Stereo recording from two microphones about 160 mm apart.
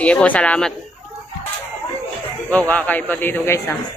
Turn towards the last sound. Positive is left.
turn(degrees=15)  # may be behind; listen again after turning